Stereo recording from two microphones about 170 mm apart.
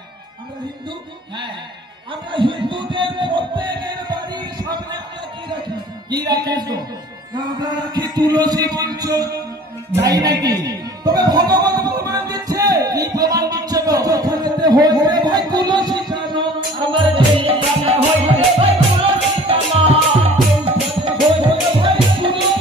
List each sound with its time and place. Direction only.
2.3 s a man's voice: 30° right (ahead or behind)
4.1 s music: 25° right (ahead or behind)
6.0 s a man's voice: 25° right (ahead or behind)
9.9 s music: 20° right (ahead or behind)